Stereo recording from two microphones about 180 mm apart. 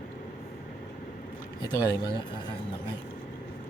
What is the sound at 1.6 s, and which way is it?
Speech, 20° left (ahead or behind).